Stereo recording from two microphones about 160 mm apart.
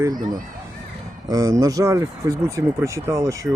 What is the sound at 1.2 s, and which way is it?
Speech, 20° right (ahead or behind).